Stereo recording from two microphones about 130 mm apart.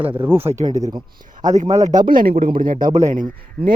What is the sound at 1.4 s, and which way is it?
Speech, 70° right (ahead or behind).